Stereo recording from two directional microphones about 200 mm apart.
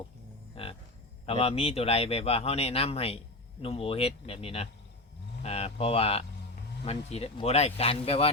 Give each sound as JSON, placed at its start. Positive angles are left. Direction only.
{"t": 0.5, "sound": "livestock", "side_deg": 30}
{"t": 1.2, "sound": "speech", "side_deg": 30}